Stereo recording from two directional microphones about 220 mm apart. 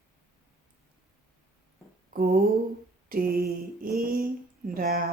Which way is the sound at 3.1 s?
40° right (ahead or behind).